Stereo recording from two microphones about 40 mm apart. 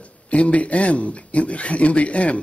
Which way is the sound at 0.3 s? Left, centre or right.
Left.